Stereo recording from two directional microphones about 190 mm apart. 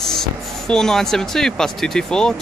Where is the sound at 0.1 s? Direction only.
5° left (ahead or behind).